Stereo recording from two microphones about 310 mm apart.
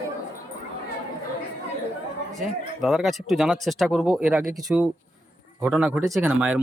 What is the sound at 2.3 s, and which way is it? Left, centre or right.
A man's voice, centre.